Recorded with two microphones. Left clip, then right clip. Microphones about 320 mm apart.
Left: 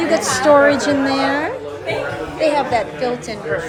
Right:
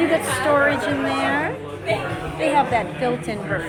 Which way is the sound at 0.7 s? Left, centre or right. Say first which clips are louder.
Left 5 dB; left.